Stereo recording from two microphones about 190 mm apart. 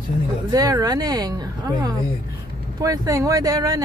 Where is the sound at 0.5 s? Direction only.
20° right (ahead or behind).